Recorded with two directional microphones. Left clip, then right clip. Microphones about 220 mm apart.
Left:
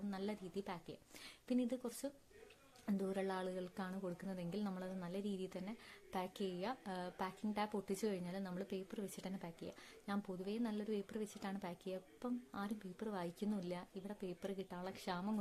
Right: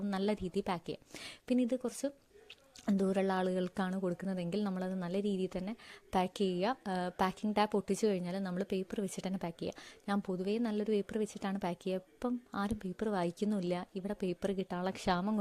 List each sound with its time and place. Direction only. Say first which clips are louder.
0.1 s a woman's voice: right 12 dB; 35° right (ahead or behind)